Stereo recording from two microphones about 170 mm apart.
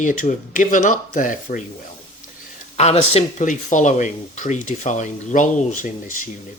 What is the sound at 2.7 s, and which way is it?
Speech, 40° left (ahead or behind).